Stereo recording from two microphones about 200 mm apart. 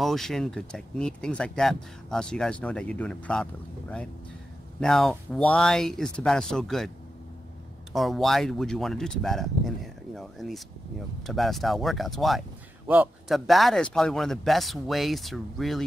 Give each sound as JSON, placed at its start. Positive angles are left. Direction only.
{"t": 0.0, "sound": "speech", "side_deg": 0}
{"t": 4.7, "sound": "speech", "side_deg": 0}
{"t": 7.9, "sound": "speech", "side_deg": 0}